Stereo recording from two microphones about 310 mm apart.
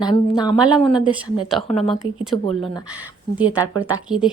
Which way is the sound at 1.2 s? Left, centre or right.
Centre.